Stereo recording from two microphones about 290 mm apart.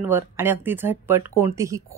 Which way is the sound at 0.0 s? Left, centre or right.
Centre.